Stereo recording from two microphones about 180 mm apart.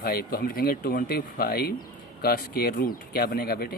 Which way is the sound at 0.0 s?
60° left (ahead or behind).